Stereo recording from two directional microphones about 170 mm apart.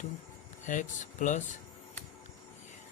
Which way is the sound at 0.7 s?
50° left (ahead or behind).